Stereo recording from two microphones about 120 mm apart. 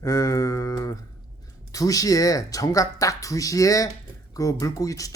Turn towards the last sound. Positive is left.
turn(degrees=30)  # may be behind; listen again after turning